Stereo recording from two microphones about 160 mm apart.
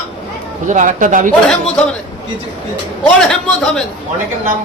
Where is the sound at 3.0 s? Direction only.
5° left (ahead or behind).